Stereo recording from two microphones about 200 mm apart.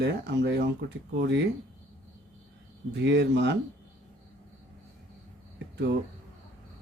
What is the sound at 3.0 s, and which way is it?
Speech, 55° right (ahead or behind).